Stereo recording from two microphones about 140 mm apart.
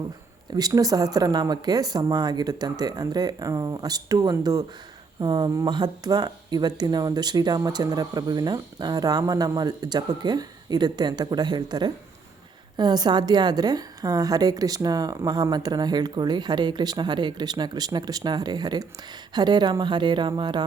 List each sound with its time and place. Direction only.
0.5 s a woman's voice: 25° right (ahead or behind)